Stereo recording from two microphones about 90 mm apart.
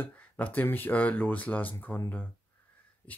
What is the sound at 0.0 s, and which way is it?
Speech, 20° left (ahead or behind).